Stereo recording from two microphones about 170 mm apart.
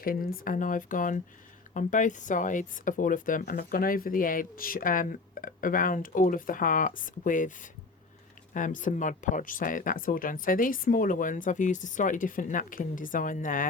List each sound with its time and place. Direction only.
0.0 s speech: 60° left (ahead or behind)